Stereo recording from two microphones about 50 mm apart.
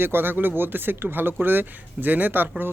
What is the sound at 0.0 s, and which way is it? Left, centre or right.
Speech, right.